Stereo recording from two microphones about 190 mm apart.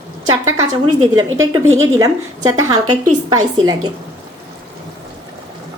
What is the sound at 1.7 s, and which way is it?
Speech, 20° right (ahead or behind).